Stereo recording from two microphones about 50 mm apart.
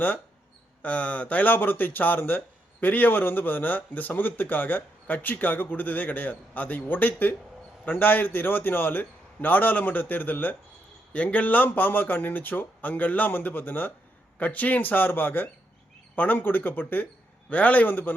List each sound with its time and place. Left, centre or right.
0.8 s speech: left
17.5 s speech: left